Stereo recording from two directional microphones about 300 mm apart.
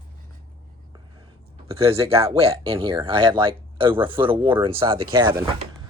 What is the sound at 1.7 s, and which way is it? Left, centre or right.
Speech, centre.